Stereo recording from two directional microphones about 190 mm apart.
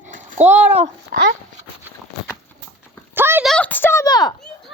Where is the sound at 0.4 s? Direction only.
10° right (ahead or behind).